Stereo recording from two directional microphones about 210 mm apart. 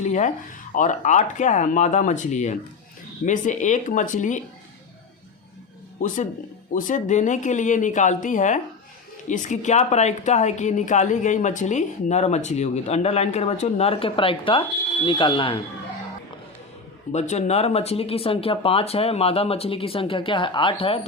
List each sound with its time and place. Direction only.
0.0 s speech: 35° left (ahead or behind)
6.7 s speech: 40° left (ahead or behind)
17.1 s speech: 30° left (ahead or behind)